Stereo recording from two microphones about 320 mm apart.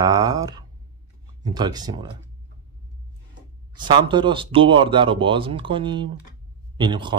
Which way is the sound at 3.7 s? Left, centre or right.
Centre.